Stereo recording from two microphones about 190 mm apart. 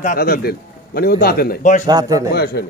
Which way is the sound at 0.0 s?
50° left (ahead or behind).